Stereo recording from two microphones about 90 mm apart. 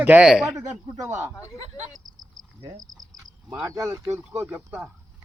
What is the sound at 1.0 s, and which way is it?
Speech, 30° right (ahead or behind).